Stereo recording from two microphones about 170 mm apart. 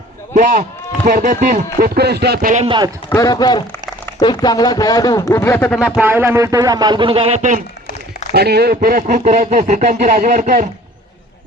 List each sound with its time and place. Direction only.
0.3 s speech: 55° right (ahead or behind)
1.0 s chopping: 55° right (ahead or behind); by 2.5 s 70° right (ahead or behind)
2.6 s a man's voice: 25° right (ahead or behind)
3.1 s speech: 20° left (ahead or behind)
6.0 s a man's voice: 10° right (ahead or behind); by 7.6 s 45° right (ahead or behind)
8.3 s speech: 70° right (ahead or behind); by 10.7 s 50° right (ahead or behind)